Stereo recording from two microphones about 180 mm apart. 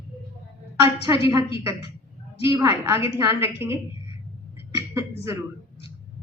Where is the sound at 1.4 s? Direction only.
30° left (ahead or behind).